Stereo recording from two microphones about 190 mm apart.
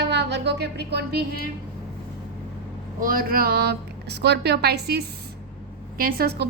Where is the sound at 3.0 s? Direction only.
50° right (ahead or behind).